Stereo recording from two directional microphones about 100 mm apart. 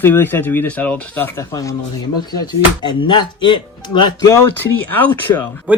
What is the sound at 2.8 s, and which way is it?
Speech, 45° left (ahead or behind).